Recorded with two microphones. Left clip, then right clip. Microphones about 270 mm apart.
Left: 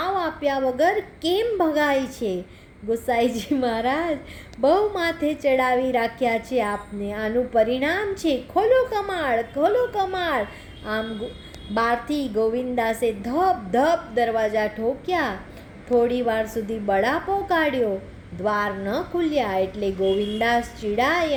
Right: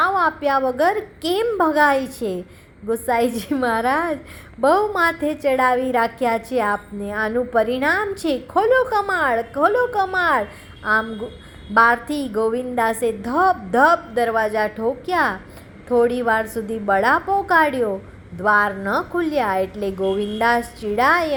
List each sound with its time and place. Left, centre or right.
0.0 s a woman's voice: centre
11.7 s a woman's voice: centre